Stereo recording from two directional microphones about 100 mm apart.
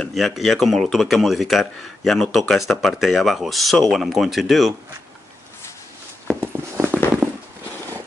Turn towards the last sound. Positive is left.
turn(degrees=-10)  # may be behind; listen again after turning